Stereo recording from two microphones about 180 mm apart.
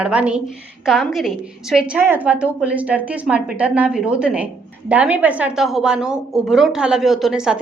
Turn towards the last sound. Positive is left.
turn(degrees=-5)  # may be behind; listen again after turning